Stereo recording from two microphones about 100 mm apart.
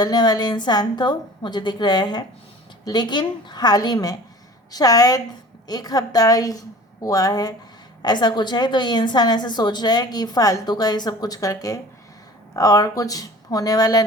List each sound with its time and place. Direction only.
0.0 s a woman's voice: 40° left (ahead or behind)